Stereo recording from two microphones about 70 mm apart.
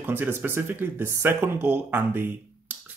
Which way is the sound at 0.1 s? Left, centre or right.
Right.